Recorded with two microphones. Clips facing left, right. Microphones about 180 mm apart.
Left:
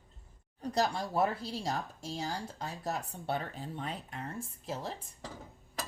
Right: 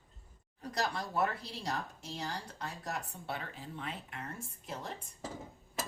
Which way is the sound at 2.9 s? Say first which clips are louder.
Left 6 dB; 35° left (ahead or behind).